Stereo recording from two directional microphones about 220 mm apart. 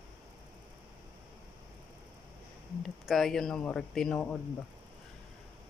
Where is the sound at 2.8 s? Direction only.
Centre (ahead or behind).